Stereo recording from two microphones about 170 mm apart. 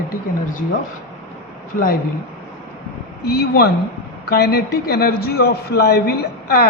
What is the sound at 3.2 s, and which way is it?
A man's voice, 70° left (ahead or behind).